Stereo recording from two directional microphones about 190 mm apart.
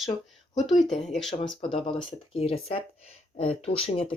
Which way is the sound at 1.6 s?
30° left (ahead or behind).